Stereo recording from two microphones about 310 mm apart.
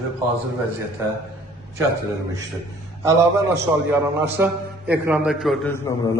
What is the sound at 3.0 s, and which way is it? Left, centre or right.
A man's voice, centre.